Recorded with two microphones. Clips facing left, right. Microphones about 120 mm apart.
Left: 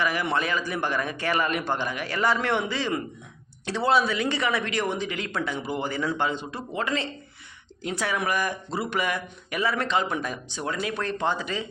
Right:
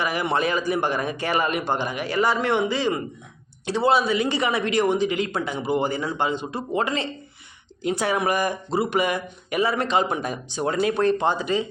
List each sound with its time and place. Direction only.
0.0 s a man's voice: 15° right (ahead or behind)
10.7 s speech: 35° right (ahead or behind)
10.9 s a man's voice: 20° right (ahead or behind)